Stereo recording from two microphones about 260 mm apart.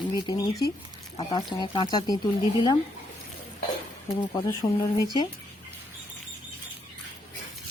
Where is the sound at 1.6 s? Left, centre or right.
Centre.